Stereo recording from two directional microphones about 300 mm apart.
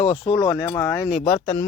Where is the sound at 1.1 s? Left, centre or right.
Left.